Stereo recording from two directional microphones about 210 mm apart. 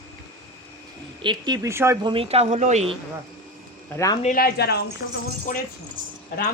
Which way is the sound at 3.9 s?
15° left (ahead or behind).